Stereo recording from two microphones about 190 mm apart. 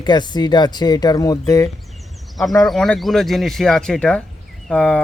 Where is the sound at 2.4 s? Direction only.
Centre (ahead or behind).